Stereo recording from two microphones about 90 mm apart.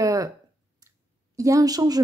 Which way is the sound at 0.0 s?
40° right (ahead or behind).